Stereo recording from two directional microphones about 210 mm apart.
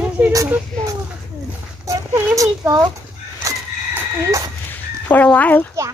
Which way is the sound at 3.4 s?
15° right (ahead or behind).